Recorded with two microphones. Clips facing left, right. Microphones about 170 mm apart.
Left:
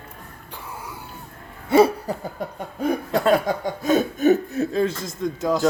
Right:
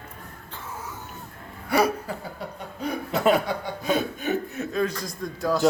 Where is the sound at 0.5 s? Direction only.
10° left (ahead or behind).